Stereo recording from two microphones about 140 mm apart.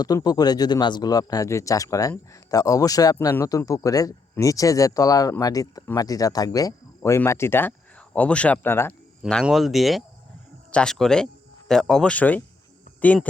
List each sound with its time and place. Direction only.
0.0 s speech: 25° left (ahead or behind)
9.2 s speech: centre (ahead or behind)